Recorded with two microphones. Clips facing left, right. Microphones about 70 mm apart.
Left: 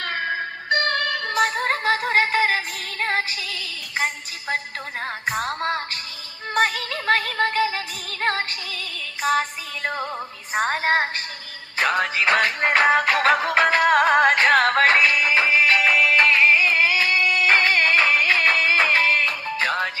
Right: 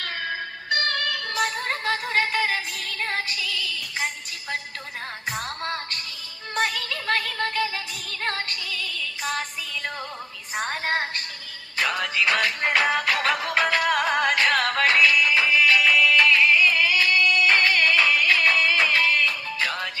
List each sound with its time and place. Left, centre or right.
0.0 s music: left
1.5 s music: left
3.1 s music: left
5.4 s music: left
6.5 s music: left
8.3 s music: left
8.7 s music: left